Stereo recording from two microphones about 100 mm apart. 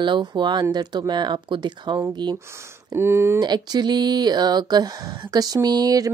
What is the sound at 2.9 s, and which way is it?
Speech, 25° right (ahead or behind).